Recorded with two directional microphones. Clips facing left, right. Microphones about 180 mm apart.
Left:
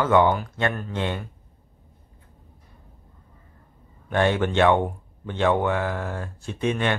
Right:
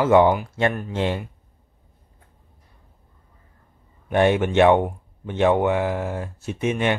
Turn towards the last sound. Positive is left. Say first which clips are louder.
# right 2 dB
turn(degrees=-20)  # may be behind; listen again after turning